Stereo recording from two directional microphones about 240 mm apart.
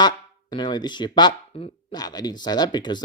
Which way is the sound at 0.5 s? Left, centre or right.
Centre.